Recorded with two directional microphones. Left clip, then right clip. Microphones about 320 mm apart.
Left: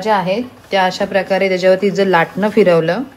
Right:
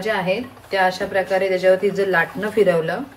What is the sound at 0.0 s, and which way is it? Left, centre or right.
Speech, centre.